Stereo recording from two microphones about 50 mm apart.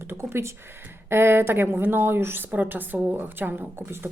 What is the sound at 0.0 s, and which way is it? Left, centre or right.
A woman's voice, right.